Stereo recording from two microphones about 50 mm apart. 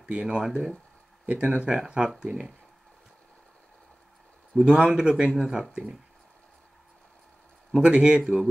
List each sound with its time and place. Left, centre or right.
0.1 s speech: right
1.2 s speech: right
4.6 s speech: centre
7.8 s speech: centre